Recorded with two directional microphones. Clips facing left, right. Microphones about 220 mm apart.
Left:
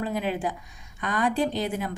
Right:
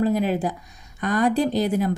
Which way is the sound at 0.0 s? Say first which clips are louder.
Right 7 dB; 40° right (ahead or behind).